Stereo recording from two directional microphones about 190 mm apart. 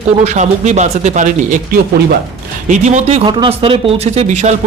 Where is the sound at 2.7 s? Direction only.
40° right (ahead or behind).